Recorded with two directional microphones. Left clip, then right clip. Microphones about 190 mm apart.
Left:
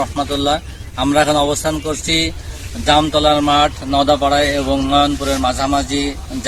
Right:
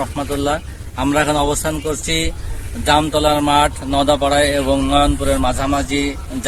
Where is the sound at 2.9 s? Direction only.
25° right (ahead or behind).